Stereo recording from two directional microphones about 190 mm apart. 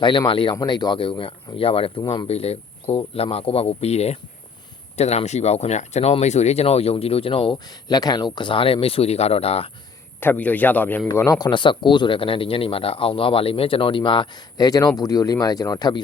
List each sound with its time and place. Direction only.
0.0 s a man's voice: 25° left (ahead or behind)
10.2 s a man's voice: 10° left (ahead or behind)